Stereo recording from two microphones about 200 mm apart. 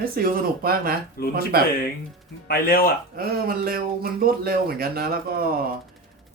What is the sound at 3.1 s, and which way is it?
Speech, 50° right (ahead or behind).